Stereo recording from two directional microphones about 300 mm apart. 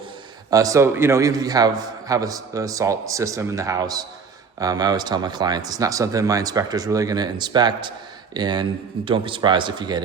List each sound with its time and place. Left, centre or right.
0.5 s speech: centre